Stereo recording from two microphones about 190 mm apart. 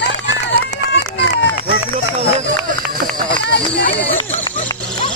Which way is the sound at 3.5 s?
65° left (ahead or behind).